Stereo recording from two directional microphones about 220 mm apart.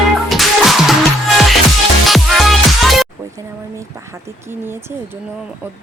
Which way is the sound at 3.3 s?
10° right (ahead or behind).